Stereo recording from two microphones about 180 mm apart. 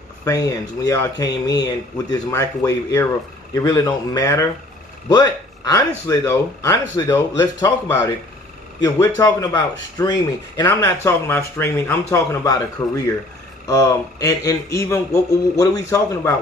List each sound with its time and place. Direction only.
0.2 s speech: 20° left (ahead or behind)